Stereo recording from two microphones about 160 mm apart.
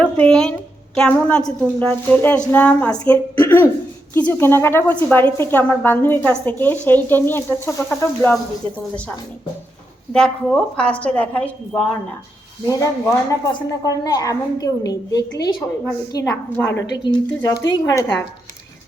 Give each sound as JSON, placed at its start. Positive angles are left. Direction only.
{"t": 0.0, "sound": "a sound", "side_deg": 5}
{"t": 0.9, "sound": "speech", "side_deg": 5}
{"t": 12.6, "sound": "a woman's voice", "side_deg": 20}